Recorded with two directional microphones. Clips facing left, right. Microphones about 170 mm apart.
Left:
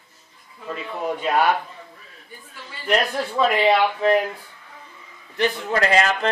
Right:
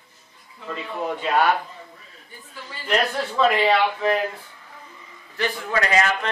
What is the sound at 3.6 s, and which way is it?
Speech, 10° left (ahead or behind).